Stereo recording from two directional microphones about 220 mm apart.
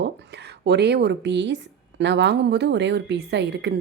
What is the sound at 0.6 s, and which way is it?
A woman's voice, 50° right (ahead or behind).